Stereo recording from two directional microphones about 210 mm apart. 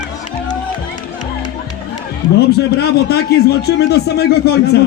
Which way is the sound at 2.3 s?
50° left (ahead or behind).